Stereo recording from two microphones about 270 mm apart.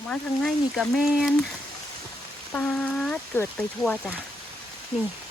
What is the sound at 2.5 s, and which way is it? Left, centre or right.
Speech, centre.